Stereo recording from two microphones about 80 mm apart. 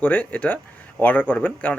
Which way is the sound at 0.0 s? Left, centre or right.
Left.